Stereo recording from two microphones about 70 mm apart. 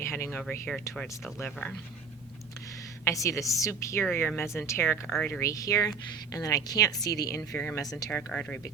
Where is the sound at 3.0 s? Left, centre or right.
Left.